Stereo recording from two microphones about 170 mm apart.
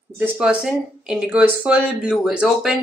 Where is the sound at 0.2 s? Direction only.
5° right (ahead or behind).